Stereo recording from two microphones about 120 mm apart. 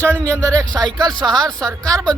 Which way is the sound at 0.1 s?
15° left (ahead or behind).